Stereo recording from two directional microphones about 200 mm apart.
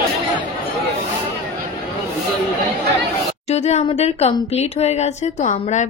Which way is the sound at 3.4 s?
35° left (ahead or behind).